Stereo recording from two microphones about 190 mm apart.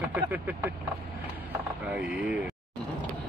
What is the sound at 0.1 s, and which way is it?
Speech, 10° right (ahead or behind).